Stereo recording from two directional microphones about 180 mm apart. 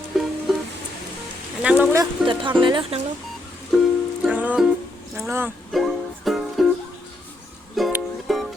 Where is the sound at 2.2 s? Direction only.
25° right (ahead or behind).